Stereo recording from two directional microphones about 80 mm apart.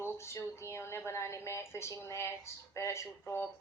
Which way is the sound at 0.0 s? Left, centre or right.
Left.